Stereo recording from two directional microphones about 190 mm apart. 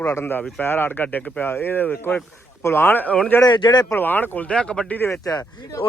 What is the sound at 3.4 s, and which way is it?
Speech, 25° left (ahead or behind).